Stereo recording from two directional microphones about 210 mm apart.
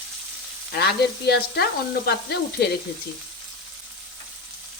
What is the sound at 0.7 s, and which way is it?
Frying, 50° left (ahead or behind).